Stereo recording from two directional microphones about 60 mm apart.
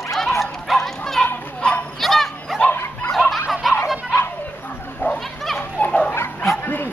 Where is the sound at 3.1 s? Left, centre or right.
Centre.